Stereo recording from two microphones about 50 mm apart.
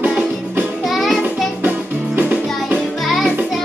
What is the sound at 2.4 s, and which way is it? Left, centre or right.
Music, centre.